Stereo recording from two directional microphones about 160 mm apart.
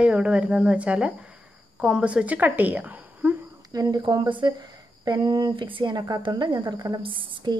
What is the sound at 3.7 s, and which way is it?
Speech, 25° right (ahead or behind).